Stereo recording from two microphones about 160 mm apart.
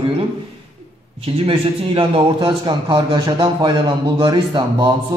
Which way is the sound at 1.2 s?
35° right (ahead or behind).